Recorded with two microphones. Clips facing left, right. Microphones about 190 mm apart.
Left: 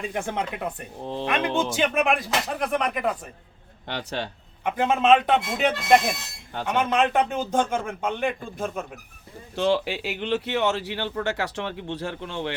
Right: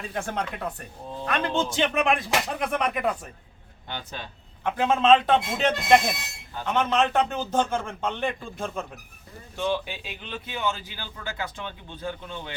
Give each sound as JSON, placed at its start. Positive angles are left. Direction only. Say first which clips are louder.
{"t": 0.1, "sound": "speech", "louder": "left 2 dB", "side_deg": 15}
{"t": 3.8, "sound": "speech", "louder": "left 6 dB", "side_deg": 75}
{"t": 4.6, "sound": "speech", "louder": "even", "side_deg": 15}
{"t": 9.6, "sound": "speech", "louder": "left 5 dB", "side_deg": 85}